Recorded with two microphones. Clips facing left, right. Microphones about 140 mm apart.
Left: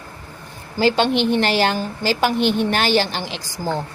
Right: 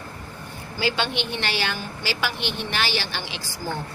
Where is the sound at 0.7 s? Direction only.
40° left (ahead or behind).